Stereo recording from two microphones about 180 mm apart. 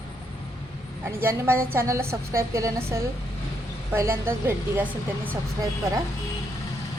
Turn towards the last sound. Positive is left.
turn(degrees=-15)  # may be behind; listen again after turning